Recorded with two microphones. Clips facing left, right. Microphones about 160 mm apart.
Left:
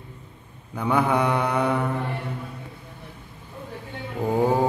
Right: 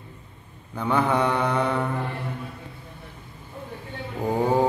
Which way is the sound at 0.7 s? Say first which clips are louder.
Left 1 dB; 10° left (ahead or behind).